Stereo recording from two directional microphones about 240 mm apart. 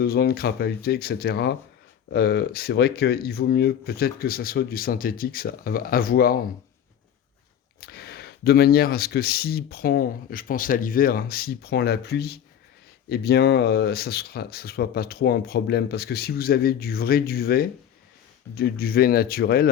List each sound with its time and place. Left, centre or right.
0.0 s speech: left
7.8 s speech: left